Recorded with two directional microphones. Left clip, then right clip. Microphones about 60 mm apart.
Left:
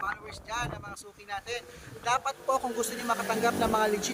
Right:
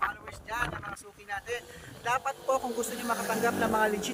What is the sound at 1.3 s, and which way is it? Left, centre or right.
Speech, left.